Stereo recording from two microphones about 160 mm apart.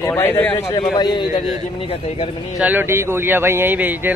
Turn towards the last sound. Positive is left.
turn(degrees=-10)  # may be behind; listen again after turning